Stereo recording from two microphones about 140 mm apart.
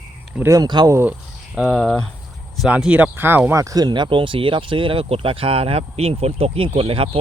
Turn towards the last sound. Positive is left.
turn(degrees=-40)  # may be behind; listen again after turning